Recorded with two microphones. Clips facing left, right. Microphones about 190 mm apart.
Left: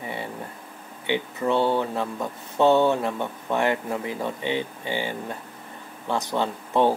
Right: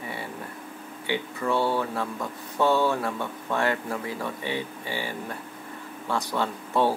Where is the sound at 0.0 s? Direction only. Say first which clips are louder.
Left 3 dB; 20° left (ahead or behind).